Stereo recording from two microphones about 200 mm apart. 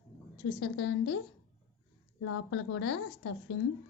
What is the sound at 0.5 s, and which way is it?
Speech, 65° left (ahead or behind).